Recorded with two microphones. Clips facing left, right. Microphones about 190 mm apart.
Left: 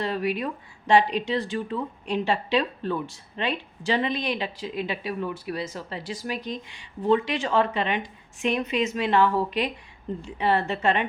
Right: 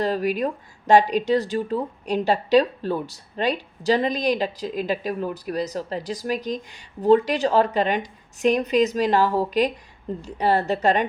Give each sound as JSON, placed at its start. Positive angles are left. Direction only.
{"t": 0.0, "sound": "speech", "side_deg": -40}